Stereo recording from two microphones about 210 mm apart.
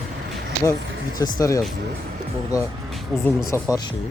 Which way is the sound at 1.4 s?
15° left (ahead or behind).